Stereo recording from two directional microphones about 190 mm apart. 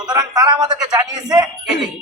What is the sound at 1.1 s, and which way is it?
Speech, 20° right (ahead or behind).